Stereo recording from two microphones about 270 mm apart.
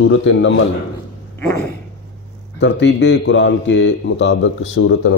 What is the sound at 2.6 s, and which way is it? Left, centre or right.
A man's voice, left.